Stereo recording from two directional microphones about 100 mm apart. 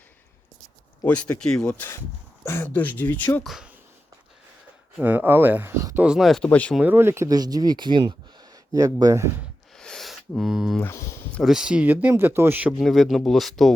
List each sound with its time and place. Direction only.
1.0 s speech: 15° left (ahead or behind)
2.4 s speech: 25° left (ahead or behind)
3.4 s speech: 5° right (ahead or behind)
5.0 s speech: 20° right (ahead or behind)
6.0 s speech: 5° right (ahead or behind)
6.5 s speech: 15° left (ahead or behind)
6.7 s speech: 20° right (ahead or behind)
7.3 s speech: 40° right (ahead or behind)
8.7 s speech: 35° right (ahead or behind)
9.7 s a sound: 5° left (ahead or behind)
10.8 s speech: 25° left (ahead or behind)
11.4 s speech: 5° right (ahead or behind)
12.8 s speech: centre (ahead or behind)